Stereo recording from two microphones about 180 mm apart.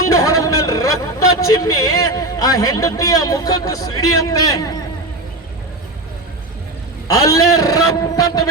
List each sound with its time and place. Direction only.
0.0 s speech: 20° left (ahead or behind)
7.1 s a man's voice: 20° left (ahead or behind)